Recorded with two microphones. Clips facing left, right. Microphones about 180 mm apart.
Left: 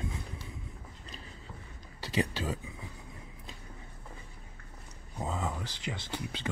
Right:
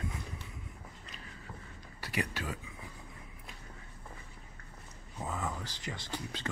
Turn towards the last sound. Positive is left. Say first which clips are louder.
# left 2 dB
turn(degrees=20)  # may be behind; listen again after turning